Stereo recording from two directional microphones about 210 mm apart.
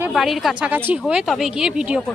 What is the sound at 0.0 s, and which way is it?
Speech, centre (ahead or behind).